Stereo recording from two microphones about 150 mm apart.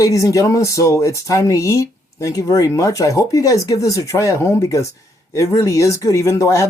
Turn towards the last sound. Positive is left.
turn(degrees=20)  # may be behind; listen again after turning